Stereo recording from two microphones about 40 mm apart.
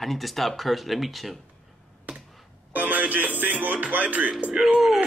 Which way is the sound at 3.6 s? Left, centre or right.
Right.